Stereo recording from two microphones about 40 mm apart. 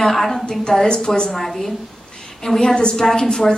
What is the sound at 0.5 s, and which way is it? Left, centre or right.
Speech, centre.